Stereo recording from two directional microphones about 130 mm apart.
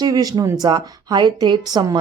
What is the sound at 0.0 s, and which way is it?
Speech, 30° right (ahead or behind).